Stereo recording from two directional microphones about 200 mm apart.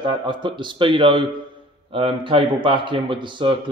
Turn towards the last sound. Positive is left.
turn(degrees=-25)  # may be behind; listen again after turning